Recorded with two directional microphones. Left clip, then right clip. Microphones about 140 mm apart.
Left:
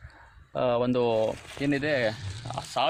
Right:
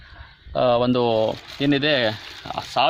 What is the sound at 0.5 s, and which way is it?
Speech, 35° left (ahead or behind).